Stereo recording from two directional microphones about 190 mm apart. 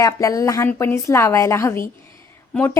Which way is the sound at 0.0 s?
20° left (ahead or behind).